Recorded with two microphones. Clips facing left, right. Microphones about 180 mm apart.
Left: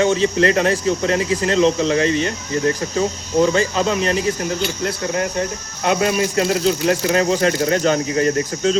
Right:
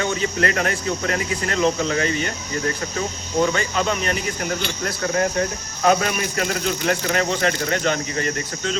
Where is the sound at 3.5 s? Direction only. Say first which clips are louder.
Left 4 dB; 35° left (ahead or behind).